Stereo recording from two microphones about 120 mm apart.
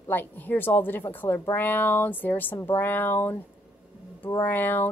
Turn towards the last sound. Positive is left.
turn(degrees=15)  # may be behind; listen again after turning